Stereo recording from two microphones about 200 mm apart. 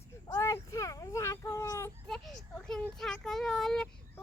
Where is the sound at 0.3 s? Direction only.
15° left (ahead or behind).